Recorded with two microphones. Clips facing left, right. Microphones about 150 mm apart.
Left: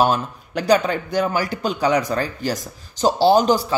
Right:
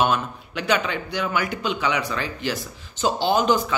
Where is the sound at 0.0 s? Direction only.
35° left (ahead or behind).